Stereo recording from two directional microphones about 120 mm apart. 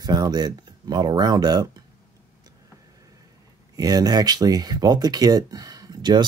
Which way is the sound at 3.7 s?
30° right (ahead or behind).